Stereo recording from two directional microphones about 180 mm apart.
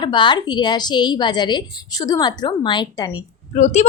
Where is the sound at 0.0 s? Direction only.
25° left (ahead or behind).